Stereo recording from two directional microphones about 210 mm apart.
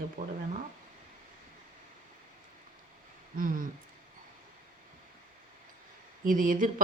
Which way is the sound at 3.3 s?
40° right (ahead or behind).